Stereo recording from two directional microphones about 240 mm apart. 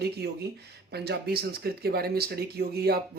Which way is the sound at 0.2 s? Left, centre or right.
Right.